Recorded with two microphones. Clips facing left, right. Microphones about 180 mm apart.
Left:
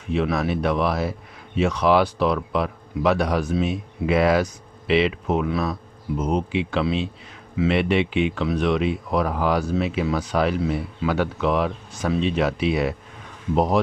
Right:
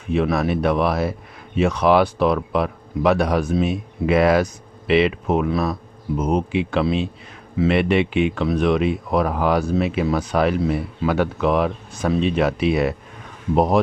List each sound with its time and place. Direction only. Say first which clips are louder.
0.1 s speech: right 3 dB; 50° right (ahead or behind)
6.1 s speech: right 3 dB; 55° right (ahead or behind)